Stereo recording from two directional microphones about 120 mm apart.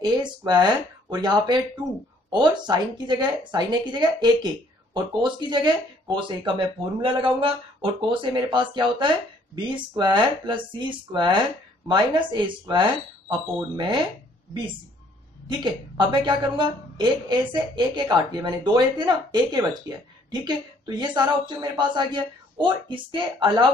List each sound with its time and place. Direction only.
0.0 s a woman's voice: 35° right (ahead or behind)
15.4 s a woman's voice: 40° right (ahead or behind)